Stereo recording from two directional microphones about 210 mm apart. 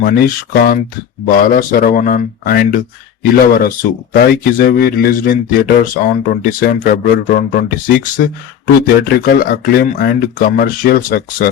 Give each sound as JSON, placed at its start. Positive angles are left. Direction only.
{"t": 0.0, "sound": "a man's voice", "side_deg": 45}
{"t": 4.1, "sound": "a man's voice", "side_deg": 45}